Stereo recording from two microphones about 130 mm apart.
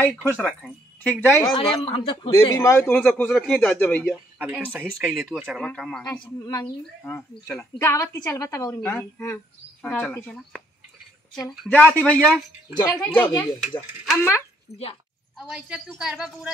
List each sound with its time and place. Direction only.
0.4 s speech: 5° left (ahead or behind)
1.5 s speech: 45° left (ahead or behind)
2.3 s a man's voice: 25° left (ahead or behind)
2.9 s a woman's voice: 10° left (ahead or behind)
4.4 s speech: 10° right (ahead or behind)
4.8 s a woman's voice: centre (ahead or behind)
11.7 s a woman's voice: 15° left (ahead or behind)
13.2 s speech: 35° left (ahead or behind)
13.6 s a woman's voice: centre (ahead or behind)
14.1 s a man's voice: 20° left (ahead or behind)
15.3 s a woman's voice: 5° right (ahead or behind)